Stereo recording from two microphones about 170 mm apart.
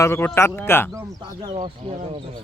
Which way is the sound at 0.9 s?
25° right (ahead or behind).